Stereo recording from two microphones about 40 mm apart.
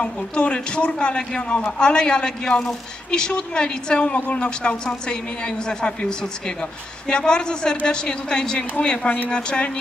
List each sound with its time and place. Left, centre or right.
0.0 s a woman's voice: left
5.7 s speech: left